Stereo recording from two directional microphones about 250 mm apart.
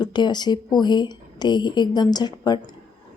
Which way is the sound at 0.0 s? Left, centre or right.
Centre.